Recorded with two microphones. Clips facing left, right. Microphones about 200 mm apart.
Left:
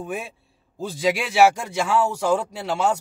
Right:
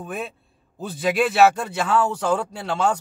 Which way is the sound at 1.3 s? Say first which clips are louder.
Left 3 dB; 10° left (ahead or behind).